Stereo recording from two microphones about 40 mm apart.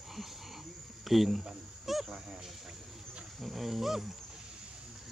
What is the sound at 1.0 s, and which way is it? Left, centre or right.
Insect, centre.